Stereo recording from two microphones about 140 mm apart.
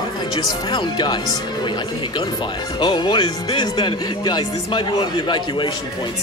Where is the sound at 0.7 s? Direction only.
30° left (ahead or behind).